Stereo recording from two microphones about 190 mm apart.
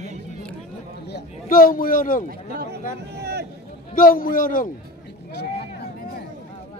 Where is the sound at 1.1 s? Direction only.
50° left (ahead or behind).